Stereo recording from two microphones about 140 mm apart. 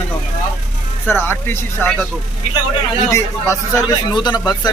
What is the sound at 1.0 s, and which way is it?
Speech, 15° left (ahead or behind).